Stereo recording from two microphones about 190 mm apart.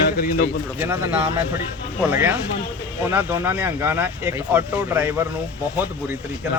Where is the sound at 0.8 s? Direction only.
10° right (ahead or behind).